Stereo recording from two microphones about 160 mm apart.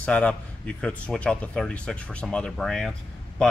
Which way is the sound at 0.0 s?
5° left (ahead or behind).